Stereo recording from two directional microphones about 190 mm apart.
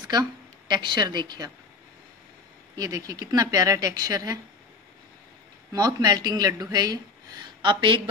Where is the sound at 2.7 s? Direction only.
20° right (ahead or behind).